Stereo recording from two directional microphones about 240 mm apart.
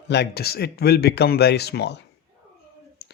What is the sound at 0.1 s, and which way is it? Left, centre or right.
Speech, left.